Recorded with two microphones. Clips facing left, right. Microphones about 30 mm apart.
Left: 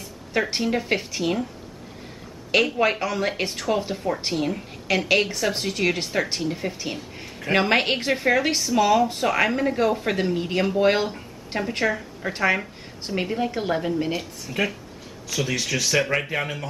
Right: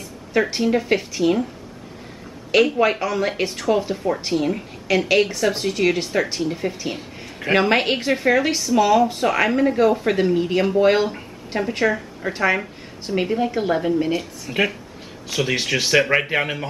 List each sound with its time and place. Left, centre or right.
0.3 s a woman's voice: centre
2.5 s a woman's voice: centre
14.5 s speech: right